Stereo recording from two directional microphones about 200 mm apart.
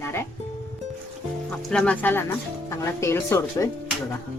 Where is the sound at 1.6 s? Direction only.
5° left (ahead or behind).